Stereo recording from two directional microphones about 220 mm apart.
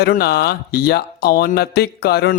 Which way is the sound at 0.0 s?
45° left (ahead or behind).